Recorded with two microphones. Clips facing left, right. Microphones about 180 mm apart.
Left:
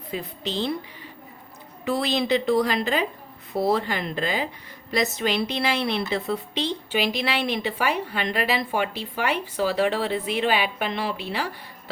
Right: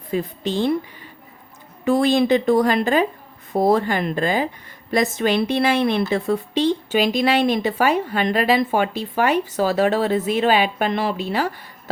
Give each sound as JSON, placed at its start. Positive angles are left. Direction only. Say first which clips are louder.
{"t": 0.1, "sound": "a woman's voice", "louder": "right 7 dB", "side_deg": -50}
{"t": 1.8, "sound": "a woman's voice", "louder": "right 8 dB", "side_deg": -45}